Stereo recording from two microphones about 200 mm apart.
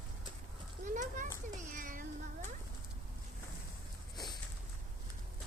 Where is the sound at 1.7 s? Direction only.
40° right (ahead or behind).